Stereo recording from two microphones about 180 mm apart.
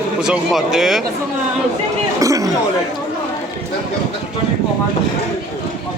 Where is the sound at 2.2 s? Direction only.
20° right (ahead or behind).